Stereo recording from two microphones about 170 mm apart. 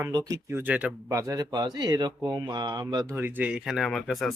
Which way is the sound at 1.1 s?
20° right (ahead or behind).